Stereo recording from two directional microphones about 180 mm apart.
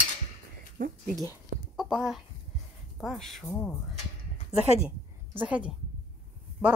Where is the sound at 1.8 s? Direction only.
Centre (ahead or behind).